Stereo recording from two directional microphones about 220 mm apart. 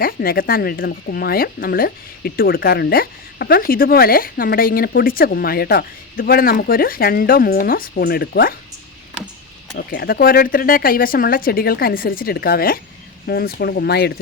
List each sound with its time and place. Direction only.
0.0 s speech: 40° left (ahead or behind)
9.7 s speech: 45° left (ahead or behind)